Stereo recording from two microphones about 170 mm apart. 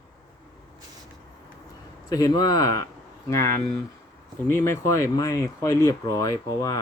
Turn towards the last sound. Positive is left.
turn(degrees=20)  # may be behind; listen again after turning